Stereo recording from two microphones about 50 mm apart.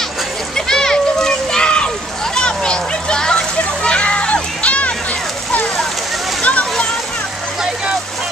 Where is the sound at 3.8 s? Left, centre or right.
Left.